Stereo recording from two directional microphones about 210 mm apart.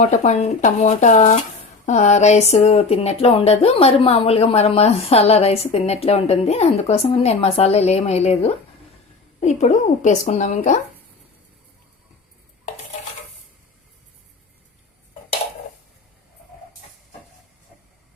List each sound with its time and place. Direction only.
0.0 s speech: 35° left (ahead or behind)